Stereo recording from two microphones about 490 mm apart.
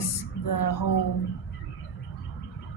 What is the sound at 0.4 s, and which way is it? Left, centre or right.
Speech, left.